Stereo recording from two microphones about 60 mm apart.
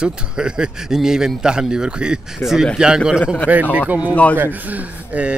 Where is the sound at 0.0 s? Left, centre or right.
Centre.